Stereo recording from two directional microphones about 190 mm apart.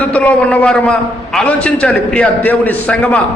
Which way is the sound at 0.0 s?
5° left (ahead or behind).